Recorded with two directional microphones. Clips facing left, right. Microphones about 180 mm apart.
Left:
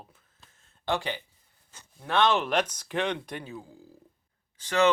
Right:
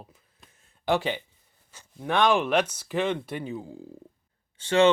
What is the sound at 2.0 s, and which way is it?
Speech, 15° right (ahead or behind).